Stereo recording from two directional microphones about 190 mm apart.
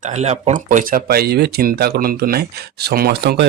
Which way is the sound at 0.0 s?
35° right (ahead or behind).